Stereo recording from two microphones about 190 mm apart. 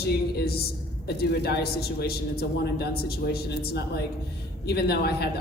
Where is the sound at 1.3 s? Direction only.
60° left (ahead or behind).